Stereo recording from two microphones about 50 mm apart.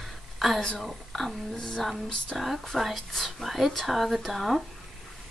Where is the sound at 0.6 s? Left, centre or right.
Centre.